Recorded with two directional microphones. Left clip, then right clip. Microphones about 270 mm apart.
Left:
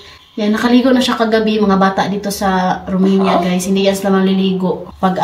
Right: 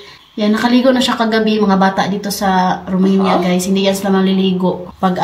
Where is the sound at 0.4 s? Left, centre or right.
Centre.